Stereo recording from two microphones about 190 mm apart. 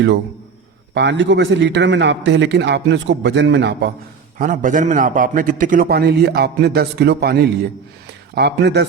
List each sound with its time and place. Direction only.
0.9 s a man's voice: 65° right (ahead or behind)
4.4 s a man's voice: 45° right (ahead or behind); by 8.9 s 60° right (ahead or behind)